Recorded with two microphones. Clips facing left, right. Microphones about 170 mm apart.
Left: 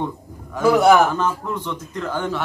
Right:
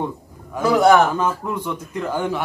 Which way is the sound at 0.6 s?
5° left (ahead or behind).